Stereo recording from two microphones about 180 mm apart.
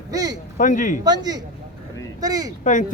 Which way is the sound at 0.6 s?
45° left (ahead or behind).